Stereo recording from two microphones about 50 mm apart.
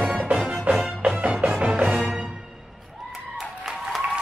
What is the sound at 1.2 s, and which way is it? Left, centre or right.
Music, right.